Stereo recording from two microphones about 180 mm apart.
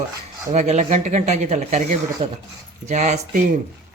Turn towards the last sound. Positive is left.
turn(degrees=-40)  # may be behind; listen again after turning